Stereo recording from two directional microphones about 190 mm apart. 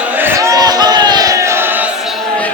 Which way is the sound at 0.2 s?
15° right (ahead or behind).